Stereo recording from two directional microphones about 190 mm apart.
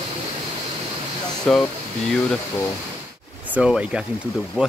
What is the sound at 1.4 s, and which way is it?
Speech, 5° left (ahead or behind).